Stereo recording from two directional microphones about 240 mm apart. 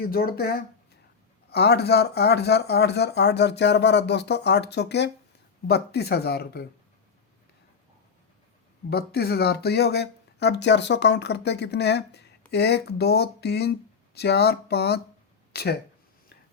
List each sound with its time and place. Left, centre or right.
0.0 s speech: left
8.9 s speech: left